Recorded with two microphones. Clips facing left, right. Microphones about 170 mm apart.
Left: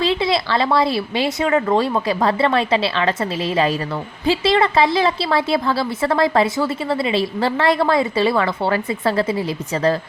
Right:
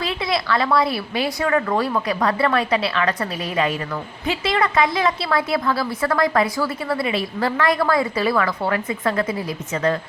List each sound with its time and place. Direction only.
0.0 s a woman's voice: 30° left (ahead or behind)